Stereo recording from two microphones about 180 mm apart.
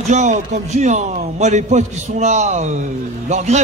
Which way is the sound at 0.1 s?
40° right (ahead or behind).